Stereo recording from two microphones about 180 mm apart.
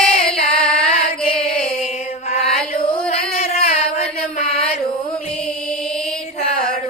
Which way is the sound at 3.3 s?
35° left (ahead or behind).